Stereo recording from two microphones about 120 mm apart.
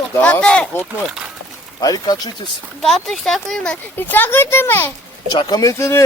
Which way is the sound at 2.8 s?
Centre (ahead or behind).